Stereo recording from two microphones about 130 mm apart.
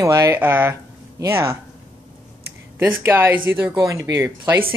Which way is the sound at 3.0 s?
20° right (ahead or behind).